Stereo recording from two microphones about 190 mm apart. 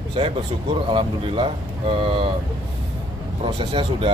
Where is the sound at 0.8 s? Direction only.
30° right (ahead or behind).